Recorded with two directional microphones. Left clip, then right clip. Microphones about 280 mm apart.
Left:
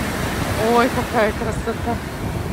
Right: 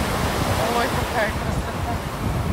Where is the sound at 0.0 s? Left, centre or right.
Centre.